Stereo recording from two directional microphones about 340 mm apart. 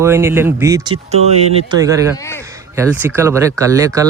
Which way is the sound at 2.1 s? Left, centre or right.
Centre.